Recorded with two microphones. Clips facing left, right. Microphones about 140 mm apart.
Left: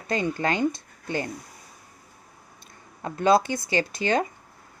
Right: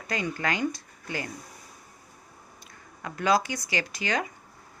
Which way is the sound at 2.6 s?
25° left (ahead or behind).